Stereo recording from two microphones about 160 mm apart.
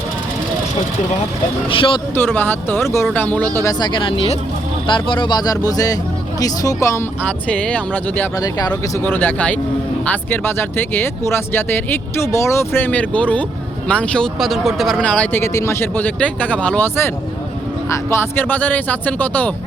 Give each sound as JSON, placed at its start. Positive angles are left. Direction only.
{"t": 1.7, "sound": "speech", "side_deg": 35}
{"t": 2.1, "sound": "speech", "side_deg": 10}
{"t": 3.6, "sound": "speech", "side_deg": 25}
{"t": 8.4, "sound": "speech", "side_deg": 25}
{"t": 9.0, "sound": "speech", "side_deg": 10}